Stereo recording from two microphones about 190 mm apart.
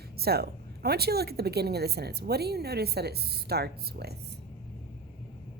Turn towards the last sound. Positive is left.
turn(degrees=-55)  # may be behind; listen again after turning